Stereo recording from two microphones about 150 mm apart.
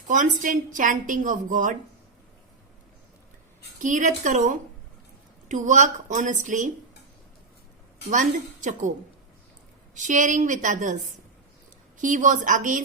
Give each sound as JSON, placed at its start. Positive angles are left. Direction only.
{"t": 0.1, "sound": "a woman's voice", "side_deg": -60}
{"t": 3.8, "sound": "a woman's voice", "side_deg": -55}
{"t": 8.1, "sound": "a woman's voice", "side_deg": -55}
{"t": 9.9, "sound": "a woman's voice", "side_deg": -55}